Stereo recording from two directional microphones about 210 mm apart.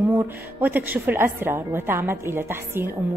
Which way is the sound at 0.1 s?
10° right (ahead or behind).